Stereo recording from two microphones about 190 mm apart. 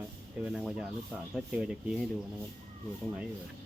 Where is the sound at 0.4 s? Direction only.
5° right (ahead or behind).